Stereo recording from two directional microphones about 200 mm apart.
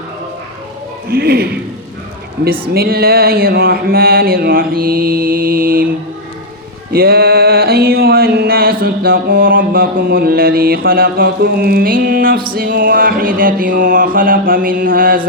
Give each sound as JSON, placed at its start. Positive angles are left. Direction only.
{"t": 1.1, "sound": "speech", "side_deg": -50}
{"t": 6.9, "sound": "a sound", "side_deg": -50}
{"t": 12.5, "sound": "speech", "side_deg": -45}